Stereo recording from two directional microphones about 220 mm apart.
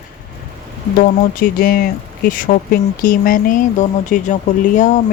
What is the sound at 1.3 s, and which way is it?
Speech, 40° left (ahead or behind).